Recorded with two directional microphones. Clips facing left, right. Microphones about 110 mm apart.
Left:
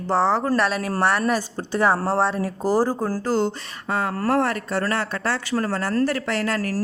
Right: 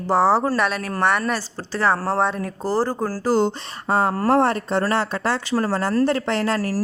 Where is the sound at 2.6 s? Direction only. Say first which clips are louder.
Left 1 dB; 10° left (ahead or behind).